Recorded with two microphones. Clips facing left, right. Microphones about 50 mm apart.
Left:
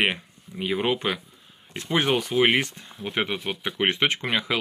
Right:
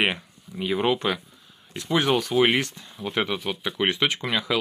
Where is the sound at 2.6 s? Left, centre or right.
Left.